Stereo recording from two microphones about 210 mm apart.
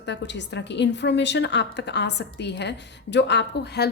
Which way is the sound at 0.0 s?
55° left (ahead or behind).